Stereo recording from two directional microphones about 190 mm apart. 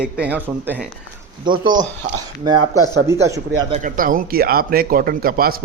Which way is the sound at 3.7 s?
45° right (ahead or behind).